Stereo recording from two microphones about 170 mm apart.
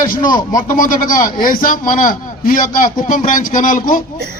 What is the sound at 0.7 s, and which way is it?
A man's voice, 50° left (ahead or behind).